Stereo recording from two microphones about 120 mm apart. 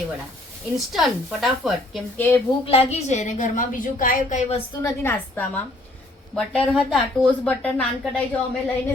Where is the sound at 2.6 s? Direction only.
60° left (ahead or behind).